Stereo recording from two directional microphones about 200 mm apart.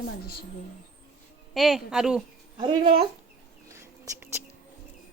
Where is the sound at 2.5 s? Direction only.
25° right (ahead or behind).